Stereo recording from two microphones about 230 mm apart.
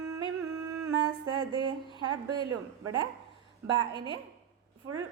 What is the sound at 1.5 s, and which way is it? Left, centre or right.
Speech, centre.